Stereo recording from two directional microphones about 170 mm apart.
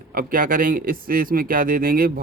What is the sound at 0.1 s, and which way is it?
Speech, 55° right (ahead or behind).